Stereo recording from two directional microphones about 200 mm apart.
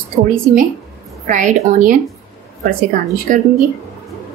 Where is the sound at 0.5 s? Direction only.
45° right (ahead or behind).